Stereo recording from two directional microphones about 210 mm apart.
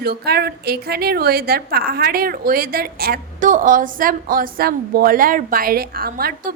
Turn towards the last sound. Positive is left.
turn(degrees=-45)  # may be behind; listen again after turning